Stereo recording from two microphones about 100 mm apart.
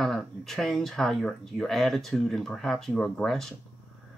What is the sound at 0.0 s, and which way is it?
Speech, 5° left (ahead or behind).